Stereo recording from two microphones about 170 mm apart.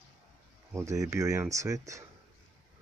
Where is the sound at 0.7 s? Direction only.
15° right (ahead or behind).